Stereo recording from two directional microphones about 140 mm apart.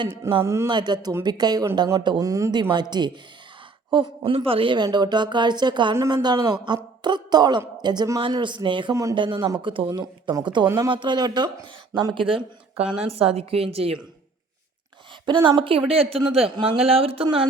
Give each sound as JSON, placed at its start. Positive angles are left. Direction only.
{"t": 0.0, "sound": "a woman's voice", "side_deg": -35}
{"t": 0.4, "sound": "speech", "side_deg": -20}
{"t": 0.7, "sound": "a woman's voice", "side_deg": -30}
{"t": 4.2, "sound": "a woman's voice", "side_deg": -40}
{"t": 15.3, "sound": "a woman's voice", "side_deg": -35}